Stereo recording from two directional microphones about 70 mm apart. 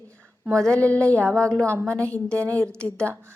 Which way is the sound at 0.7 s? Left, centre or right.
Left.